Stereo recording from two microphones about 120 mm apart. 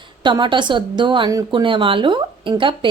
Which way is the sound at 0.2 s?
40° right (ahead or behind).